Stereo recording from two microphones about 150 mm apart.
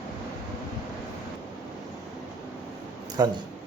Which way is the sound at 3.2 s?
25° right (ahead or behind).